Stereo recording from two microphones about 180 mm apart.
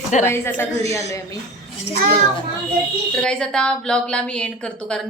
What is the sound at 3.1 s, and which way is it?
A woman's voice, 5° left (ahead or behind).